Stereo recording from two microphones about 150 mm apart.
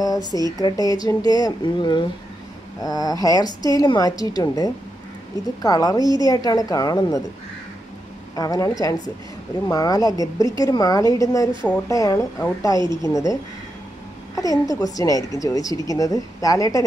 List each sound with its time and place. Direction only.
0.0 s a sound: 25° left (ahead or behind)
0.5 s a woman's voice: 25° left (ahead or behind)
8.4 s a woman's voice: 25° left (ahead or behind)
12.7 s speech: 30° right (ahead or behind)
13.0 s a woman's voice: 20° left (ahead or behind)